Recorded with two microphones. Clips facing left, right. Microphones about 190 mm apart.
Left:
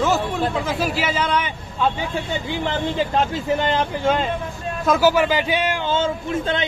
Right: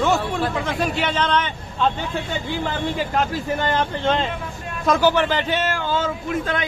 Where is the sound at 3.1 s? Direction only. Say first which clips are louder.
Left 2 dB; 20° left (ahead or behind).